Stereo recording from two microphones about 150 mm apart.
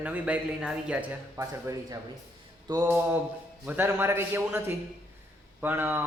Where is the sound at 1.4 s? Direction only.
20° right (ahead or behind).